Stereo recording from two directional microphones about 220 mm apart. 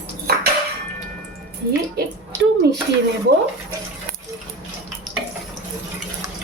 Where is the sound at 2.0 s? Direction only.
45° right (ahead or behind).